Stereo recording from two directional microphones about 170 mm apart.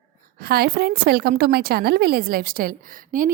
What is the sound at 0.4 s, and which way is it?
A woman's voice, 65° right (ahead or behind).